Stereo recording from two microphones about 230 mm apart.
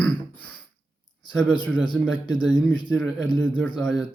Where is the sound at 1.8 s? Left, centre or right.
Centre.